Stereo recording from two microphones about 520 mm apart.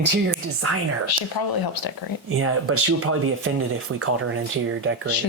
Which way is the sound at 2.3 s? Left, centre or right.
Right.